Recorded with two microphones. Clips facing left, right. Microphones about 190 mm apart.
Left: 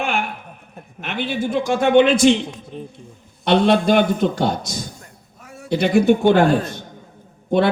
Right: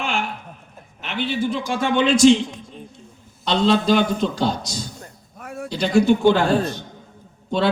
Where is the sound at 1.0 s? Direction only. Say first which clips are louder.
Even; 50° left (ahead or behind).